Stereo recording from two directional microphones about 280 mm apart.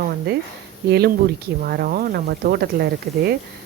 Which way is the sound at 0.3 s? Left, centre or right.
Right.